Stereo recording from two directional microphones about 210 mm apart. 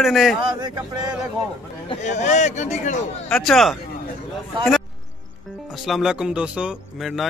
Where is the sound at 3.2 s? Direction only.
Centre (ahead or behind).